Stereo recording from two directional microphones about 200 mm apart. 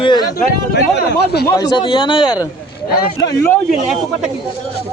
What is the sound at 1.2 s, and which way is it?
Speech, 55° left (ahead or behind).